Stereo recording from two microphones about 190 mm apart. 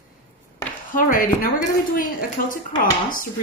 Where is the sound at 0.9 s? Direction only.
45° left (ahead or behind).